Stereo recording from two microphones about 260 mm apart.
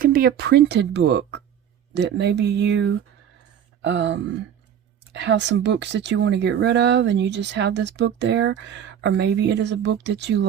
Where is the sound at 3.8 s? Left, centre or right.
Right.